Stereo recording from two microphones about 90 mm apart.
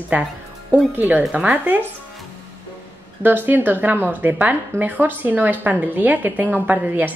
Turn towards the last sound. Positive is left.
turn(degrees=-20)  # may be behind; listen again after turning